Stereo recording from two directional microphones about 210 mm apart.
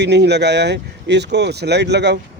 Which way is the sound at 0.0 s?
55° right (ahead or behind).